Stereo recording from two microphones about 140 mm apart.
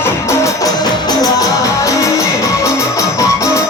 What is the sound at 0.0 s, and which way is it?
Music, 20° left (ahead or behind).